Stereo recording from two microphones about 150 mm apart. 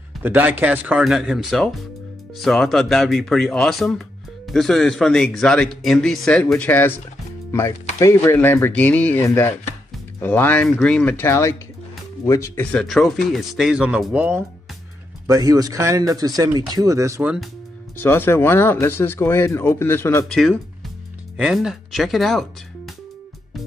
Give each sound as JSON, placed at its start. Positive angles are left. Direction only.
{"t": 0.2, "sound": "speech", "side_deg": -10}
{"t": 12.7, "sound": "speech", "side_deg": 0}
{"t": 15.2, "sound": "speech", "side_deg": -25}
{"t": 17.2, "sound": "speech", "side_deg": -10}
{"t": 17.9, "sound": "speech", "side_deg": 15}
{"t": 20.2, "sound": "speech", "side_deg": 0}